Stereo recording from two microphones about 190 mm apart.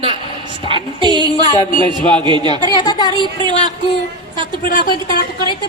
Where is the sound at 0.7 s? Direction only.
30° left (ahead or behind).